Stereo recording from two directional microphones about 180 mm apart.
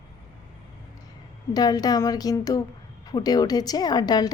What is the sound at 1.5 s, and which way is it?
A woman's voice, 20° left (ahead or behind).